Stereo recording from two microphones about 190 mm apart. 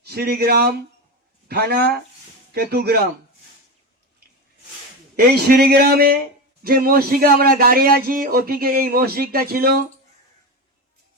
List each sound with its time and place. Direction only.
0.0 s speech: 55° right (ahead or behind)
5.1 s a man's voice: 55° right (ahead or behind)